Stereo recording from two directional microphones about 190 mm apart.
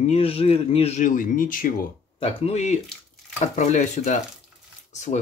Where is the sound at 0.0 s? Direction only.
30° left (ahead or behind).